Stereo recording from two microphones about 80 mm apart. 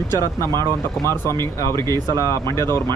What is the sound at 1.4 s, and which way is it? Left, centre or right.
Speech, left.